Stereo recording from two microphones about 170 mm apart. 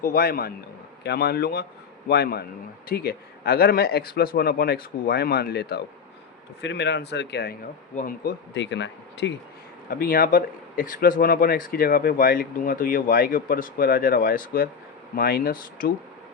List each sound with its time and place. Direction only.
0.0 s a man's voice: 60° left (ahead or behind)
6.6 s speech: 90° left
7.9 s speech: 60° left (ahead or behind); by 9.3 s 90° left
9.9 s speech: 60° left (ahead or behind)